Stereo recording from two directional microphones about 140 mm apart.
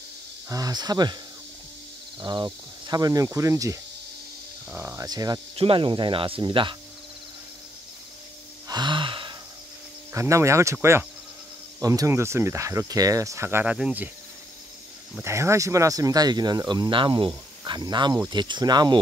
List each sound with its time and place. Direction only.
0.5 s speech: 25° right (ahead or behind)
2.2 s speech: 30° right (ahead or behind)
5.6 s speech: 40° right (ahead or behind)
8.6 s gasp: 35° right (ahead or behind)
10.1 s speech: 20° right (ahead or behind)
15.2 s speech: 20° right (ahead or behind)